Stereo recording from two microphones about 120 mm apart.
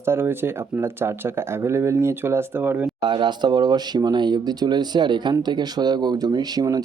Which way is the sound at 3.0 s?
40° right (ahead or behind).